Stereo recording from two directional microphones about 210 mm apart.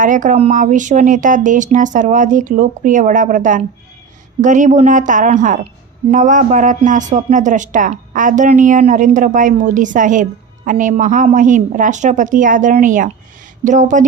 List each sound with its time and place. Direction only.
0.0 s speech: 40° right (ahead or behind)